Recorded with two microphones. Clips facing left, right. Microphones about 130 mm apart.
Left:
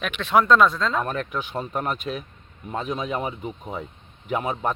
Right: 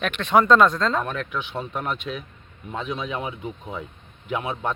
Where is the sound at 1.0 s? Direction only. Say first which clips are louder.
Left 1 dB; 40° left (ahead or behind).